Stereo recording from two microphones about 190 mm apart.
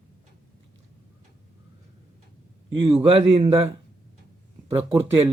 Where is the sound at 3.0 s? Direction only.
30° right (ahead or behind).